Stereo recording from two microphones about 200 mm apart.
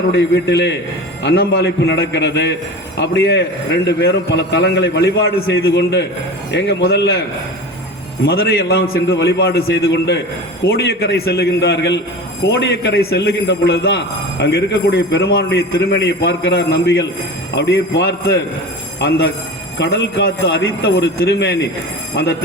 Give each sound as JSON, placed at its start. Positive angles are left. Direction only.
{"t": 0.1, "sound": "a man's voice", "side_deg": 55}
{"t": 8.3, "sound": "a man's voice", "side_deg": 50}